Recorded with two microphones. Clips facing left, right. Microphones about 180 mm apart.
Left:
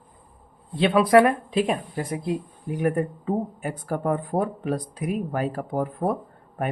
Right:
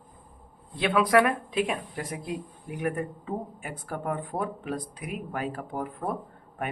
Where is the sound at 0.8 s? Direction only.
30° left (ahead or behind).